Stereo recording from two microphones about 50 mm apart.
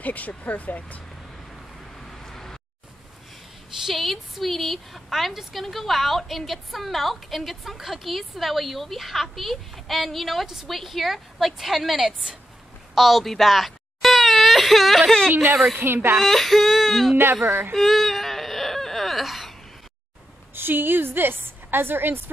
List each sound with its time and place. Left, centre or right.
0.0 s speech: left
2.0 s vehicle: centre
3.8 s a woman's voice: centre
15.8 s a woman's voice: right
16.2 s a woman's voice: centre
17.2 s a woman's voice: right
17.7 s whimper: centre
20.5 s a woman's voice: right